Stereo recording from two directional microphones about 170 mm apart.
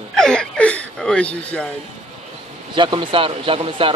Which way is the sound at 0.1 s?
5° left (ahead or behind).